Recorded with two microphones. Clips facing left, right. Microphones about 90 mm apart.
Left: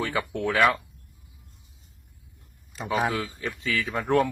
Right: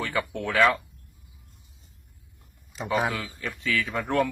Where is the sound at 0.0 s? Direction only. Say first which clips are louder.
Left 2 dB; 10° left (ahead or behind).